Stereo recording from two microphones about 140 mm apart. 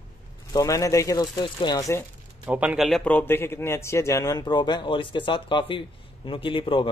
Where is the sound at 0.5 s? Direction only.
25° left (ahead or behind).